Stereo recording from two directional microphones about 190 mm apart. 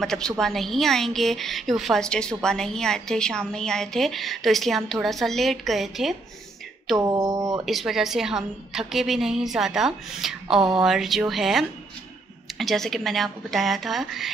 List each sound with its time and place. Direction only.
0.0 s a woman's voice: 5° left (ahead or behind)
7.0 s speech: 20° right (ahead or behind)
7.6 s a woman's voice: centre (ahead or behind)